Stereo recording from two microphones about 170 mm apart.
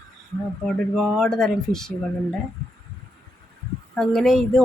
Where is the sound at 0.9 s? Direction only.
5° left (ahead or behind).